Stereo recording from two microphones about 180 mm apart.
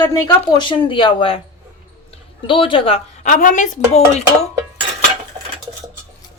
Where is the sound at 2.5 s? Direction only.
30° left (ahead or behind).